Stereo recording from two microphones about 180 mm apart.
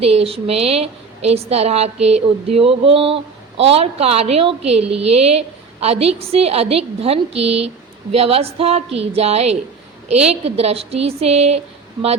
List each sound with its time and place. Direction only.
0.0 s a woman's voice: 35° right (ahead or behind)